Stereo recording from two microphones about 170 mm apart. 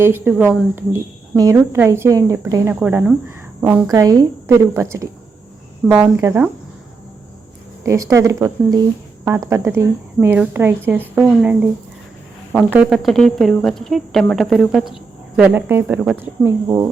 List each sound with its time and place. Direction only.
0.0 s speech: 10° right (ahead or behind)
3.9 s speech: 20° right (ahead or behind)
7.9 s speech: 20° right (ahead or behind)
12.7 s speech: 5° right (ahead or behind)